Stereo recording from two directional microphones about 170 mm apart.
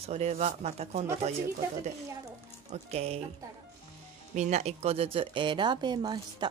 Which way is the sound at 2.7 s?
40° right (ahead or behind).